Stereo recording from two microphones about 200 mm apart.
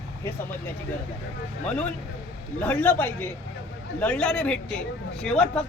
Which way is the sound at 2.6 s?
10° left (ahead or behind).